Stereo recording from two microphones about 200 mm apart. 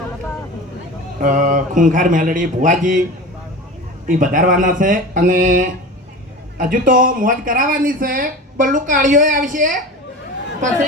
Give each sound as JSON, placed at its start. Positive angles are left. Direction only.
{"t": 1.2, "sound": "a man's voice", "side_deg": -40}
{"t": 4.0, "sound": "a man's voice", "side_deg": -45}